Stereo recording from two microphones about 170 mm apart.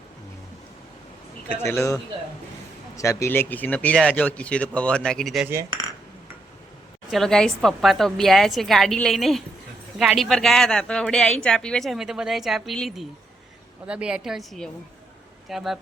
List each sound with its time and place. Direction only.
1.5 s speech: 15° left (ahead or behind)
5.5 s speech: 15° right (ahead or behind)
7.1 s a woman's voice: centre (ahead or behind)